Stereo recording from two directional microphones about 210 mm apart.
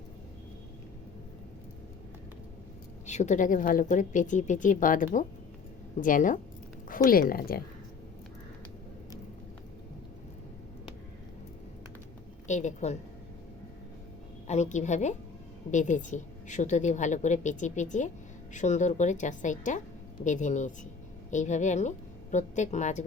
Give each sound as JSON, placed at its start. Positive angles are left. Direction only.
{"t": 3.1, "sound": "a woman's voice", "side_deg": 35}
{"t": 12.5, "sound": "a woman's voice", "side_deg": 35}
{"t": 14.4, "sound": "a woman's voice", "side_deg": 35}